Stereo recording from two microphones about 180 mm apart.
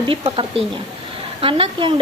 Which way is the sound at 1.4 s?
30° right (ahead or behind).